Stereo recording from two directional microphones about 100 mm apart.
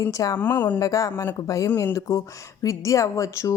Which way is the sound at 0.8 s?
35° left (ahead or behind).